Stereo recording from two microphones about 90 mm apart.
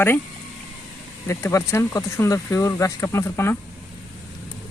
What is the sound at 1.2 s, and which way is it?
Speech, 30° left (ahead or behind).